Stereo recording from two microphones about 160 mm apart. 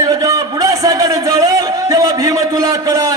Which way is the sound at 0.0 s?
20° right (ahead or behind).